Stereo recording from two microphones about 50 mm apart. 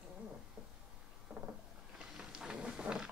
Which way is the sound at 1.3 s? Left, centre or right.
Right.